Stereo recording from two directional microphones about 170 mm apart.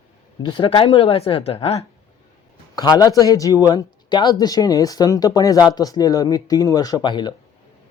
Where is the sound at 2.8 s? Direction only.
20° left (ahead or behind).